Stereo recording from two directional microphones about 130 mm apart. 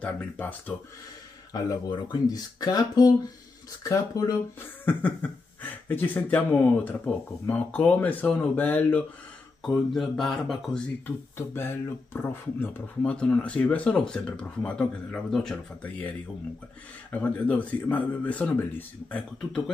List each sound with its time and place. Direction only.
0.0 s speech: 10° left (ahead or behind)
1.5 s speech: 30° left (ahead or behind)
4.6 s speech: 15° left (ahead or behind)
9.6 s speech: centre (ahead or behind)
11.3 s speech: 20° left (ahead or behind)
17.1 s speech: 10° left (ahead or behind)